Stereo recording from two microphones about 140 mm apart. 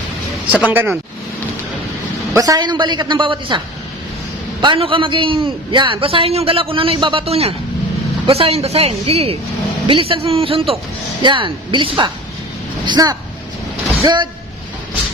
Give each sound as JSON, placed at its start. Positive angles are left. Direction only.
{"t": 0.5, "sound": "speech", "side_deg": -15}
{"t": 2.3, "sound": "a man's voice", "side_deg": -25}
{"t": 4.6, "sound": "a man's voice", "side_deg": -35}